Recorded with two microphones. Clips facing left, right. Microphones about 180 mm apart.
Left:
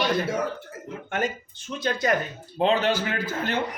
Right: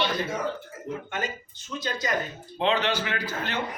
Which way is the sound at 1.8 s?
55° left (ahead or behind).